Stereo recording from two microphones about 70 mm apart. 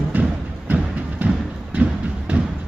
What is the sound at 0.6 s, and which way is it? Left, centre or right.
Music, right.